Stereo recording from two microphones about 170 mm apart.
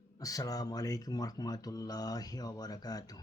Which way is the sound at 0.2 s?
20° left (ahead or behind).